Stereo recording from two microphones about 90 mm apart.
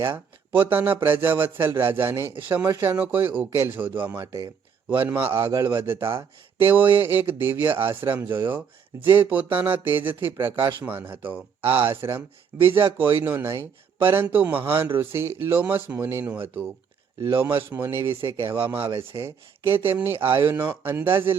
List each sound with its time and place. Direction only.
0.5 s a man's voice: 20° right (ahead or behind)
4.2 s speech: 35° right (ahead or behind)
4.9 s a man's voice: 20° right (ahead or behind)
10.5 s speech: 65° right (ahead or behind)
10.8 s a man's voice: 20° right (ahead or behind)